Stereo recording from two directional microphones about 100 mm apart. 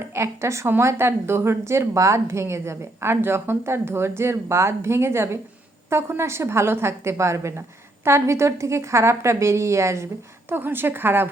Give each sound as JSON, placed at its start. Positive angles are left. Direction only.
{"t": 0.0, "sound": "a woman's voice", "side_deg": -25}